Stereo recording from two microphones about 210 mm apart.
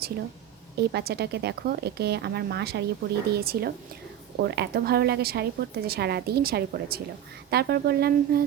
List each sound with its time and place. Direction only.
0.8 s speech: 50° right (ahead or behind)